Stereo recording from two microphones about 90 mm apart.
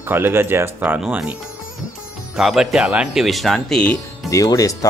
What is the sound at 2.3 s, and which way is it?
A man's voice, 5° right (ahead or behind).